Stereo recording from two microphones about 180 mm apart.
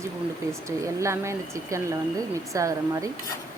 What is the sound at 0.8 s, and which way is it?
Speech, 15° right (ahead or behind).